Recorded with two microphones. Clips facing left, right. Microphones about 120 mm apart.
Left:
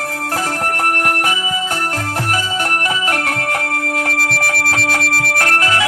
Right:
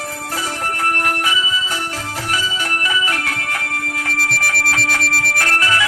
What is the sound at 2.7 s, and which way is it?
Music, 60° left (ahead or behind).